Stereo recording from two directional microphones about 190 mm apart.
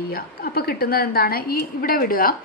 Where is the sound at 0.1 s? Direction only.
55° left (ahead or behind).